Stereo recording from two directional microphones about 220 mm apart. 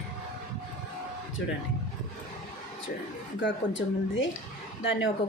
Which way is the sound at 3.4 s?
55° left (ahead or behind).